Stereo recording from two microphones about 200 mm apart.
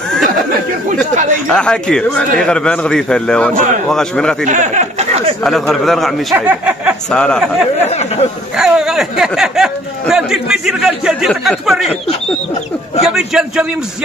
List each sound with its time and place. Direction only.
1.5 s a man's voice: 5° left (ahead or behind)
4.5 s speech: 35° right (ahead or behind)
5.4 s a man's voice: centre (ahead or behind)
7.1 s a man's voice: 5° left (ahead or behind)
13.0 s a man's voice: centre (ahead or behind)